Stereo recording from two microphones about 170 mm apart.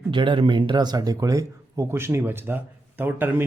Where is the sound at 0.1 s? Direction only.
30° right (ahead or behind).